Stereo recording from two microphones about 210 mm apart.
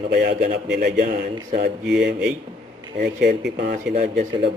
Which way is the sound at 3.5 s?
35° right (ahead or behind).